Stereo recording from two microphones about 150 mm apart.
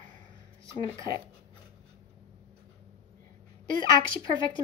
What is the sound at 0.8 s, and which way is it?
Speech, 30° left (ahead or behind).